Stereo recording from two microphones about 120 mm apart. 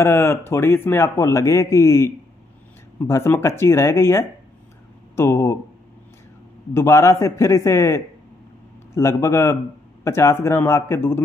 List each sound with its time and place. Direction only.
0.0 s a man's voice: 20° left (ahead or behind)
6.7 s a man's voice: 20° left (ahead or behind)